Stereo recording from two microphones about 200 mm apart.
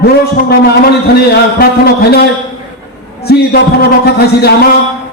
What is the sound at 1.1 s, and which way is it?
Music, 50° left (ahead or behind).